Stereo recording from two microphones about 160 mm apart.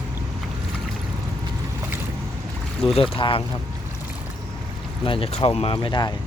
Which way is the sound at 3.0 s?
35° left (ahead or behind).